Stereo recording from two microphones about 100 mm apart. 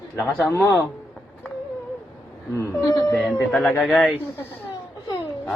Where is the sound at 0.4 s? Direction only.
25° left (ahead or behind).